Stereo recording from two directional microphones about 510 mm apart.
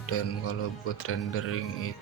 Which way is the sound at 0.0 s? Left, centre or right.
Left.